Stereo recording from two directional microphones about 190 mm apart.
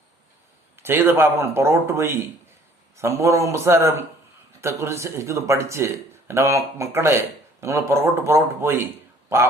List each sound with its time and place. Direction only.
0.8 s speech: 10° right (ahead or behind)